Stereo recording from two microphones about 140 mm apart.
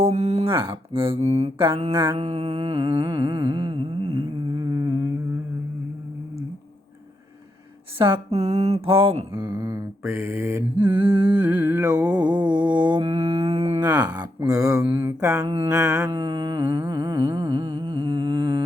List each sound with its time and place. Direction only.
0.0 s speech: 50° right (ahead or behind); by 5.0 s 25° right (ahead or behind)
7.9 s mantra: 35° right (ahead or behind)
8.3 s mantra: 50° right (ahead or behind); by 9.8 s 25° right (ahead or behind)
10.1 s mantra: 15° right (ahead or behind)
10.8 s mantra: 35° right (ahead or behind)
11.3 s mantra: 15° right (ahead or behind)
11.8 s mantra: 25° right (ahead or behind); by 13.8 s 45° right (ahead or behind)
13.8 s speech: 30° right (ahead or behind)
15.0 s mantra: 25° right (ahead or behind)